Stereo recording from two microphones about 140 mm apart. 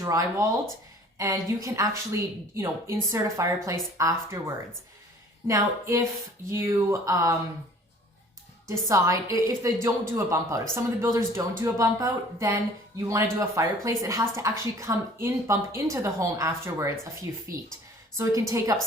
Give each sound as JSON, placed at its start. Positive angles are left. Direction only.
{"t": 0.0, "sound": "a woman's voice", "side_deg": -25}
{"t": 8.9, "sound": "a woman's voice", "side_deg": -20}